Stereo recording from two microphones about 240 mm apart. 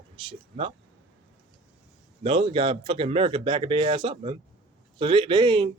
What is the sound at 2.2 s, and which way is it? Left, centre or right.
Speech, right.